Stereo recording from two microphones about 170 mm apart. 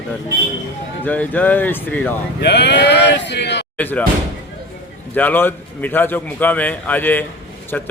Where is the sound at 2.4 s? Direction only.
85° left.